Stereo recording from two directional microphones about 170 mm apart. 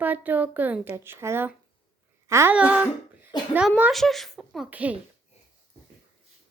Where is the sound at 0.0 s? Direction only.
10° right (ahead or behind).